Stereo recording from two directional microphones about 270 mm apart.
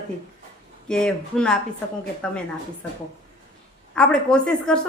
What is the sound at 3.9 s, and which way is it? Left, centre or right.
Speech, centre.